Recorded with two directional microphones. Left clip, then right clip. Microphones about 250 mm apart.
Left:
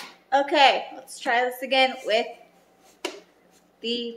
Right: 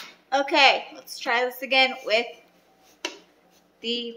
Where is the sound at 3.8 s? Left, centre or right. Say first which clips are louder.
Even; centre.